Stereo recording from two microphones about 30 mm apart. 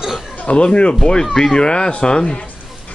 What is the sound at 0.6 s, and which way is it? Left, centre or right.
Speech, left.